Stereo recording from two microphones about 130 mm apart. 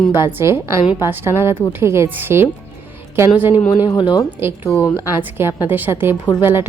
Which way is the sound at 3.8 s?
35° left (ahead or behind).